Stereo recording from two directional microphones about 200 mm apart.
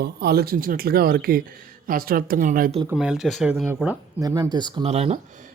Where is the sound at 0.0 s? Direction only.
55° right (ahead or behind).